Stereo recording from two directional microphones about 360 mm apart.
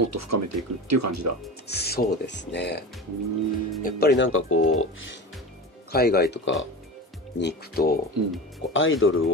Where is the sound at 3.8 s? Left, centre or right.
Left.